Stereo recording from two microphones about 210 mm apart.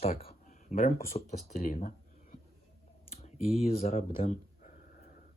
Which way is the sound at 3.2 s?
30° left (ahead or behind).